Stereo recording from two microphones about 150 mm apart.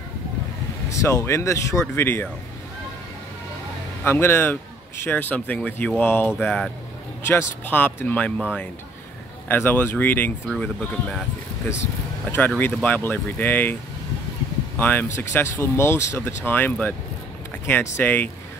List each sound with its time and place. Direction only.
0.9 s speech: 20° left (ahead or behind)
4.0 s speech: 15° left (ahead or behind)
14.8 s speech: 10° left (ahead or behind)
17.9 s speech: 15° left (ahead or behind)